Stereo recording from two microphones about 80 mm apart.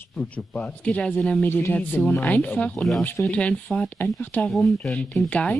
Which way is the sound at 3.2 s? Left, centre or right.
Centre.